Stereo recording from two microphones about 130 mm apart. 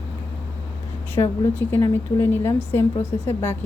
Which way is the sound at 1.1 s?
15° left (ahead or behind).